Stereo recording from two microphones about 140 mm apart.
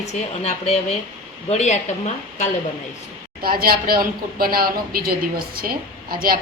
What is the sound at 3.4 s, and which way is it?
A woman's voice, 90° right.